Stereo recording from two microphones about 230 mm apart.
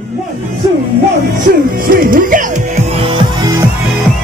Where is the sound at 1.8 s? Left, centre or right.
Right.